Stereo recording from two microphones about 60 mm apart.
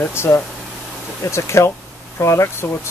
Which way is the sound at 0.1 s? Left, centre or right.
Left.